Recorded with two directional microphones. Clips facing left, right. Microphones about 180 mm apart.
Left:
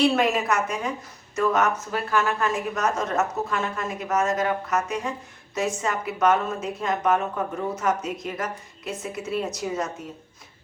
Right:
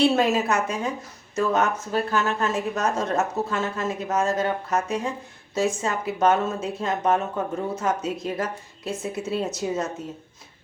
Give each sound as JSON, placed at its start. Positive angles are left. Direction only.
{"t": 0.0, "sound": "speech", "side_deg": -25}